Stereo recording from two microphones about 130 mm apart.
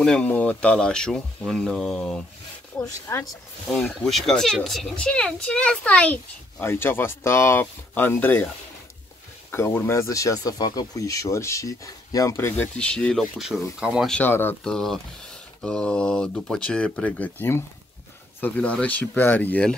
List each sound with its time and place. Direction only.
0.0 s a child's voice: 5° left (ahead or behind)
2.9 s speech: 20° left (ahead or behind)
3.7 s a child's voice: 5° left (ahead or behind)
9.5 s speech: 20° left (ahead or behind); by 14.1 s 5° right (ahead or behind)
14.1 s a child's voice: 15° left (ahead or behind)
14.6 s a child's voice: 5° left (ahead or behind)